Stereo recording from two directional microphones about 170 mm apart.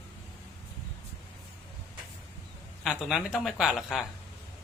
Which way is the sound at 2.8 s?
5° right (ahead or behind).